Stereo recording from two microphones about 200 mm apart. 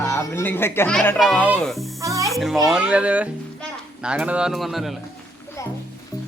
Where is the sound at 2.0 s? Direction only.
15° right (ahead or behind).